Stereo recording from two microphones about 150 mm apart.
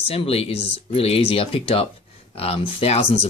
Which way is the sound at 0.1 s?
40° left (ahead or behind).